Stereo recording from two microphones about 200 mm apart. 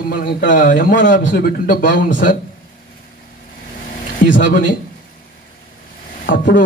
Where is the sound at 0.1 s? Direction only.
45° left (ahead or behind).